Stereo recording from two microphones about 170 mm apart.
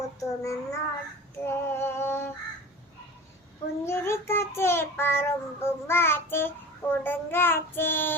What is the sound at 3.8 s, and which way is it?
Child singing, 15° left (ahead or behind).